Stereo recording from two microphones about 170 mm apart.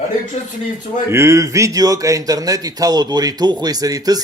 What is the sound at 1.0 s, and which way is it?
Speech, 15° right (ahead or behind).